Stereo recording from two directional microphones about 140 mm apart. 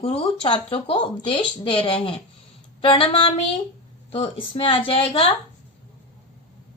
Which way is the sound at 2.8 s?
40° left (ahead or behind).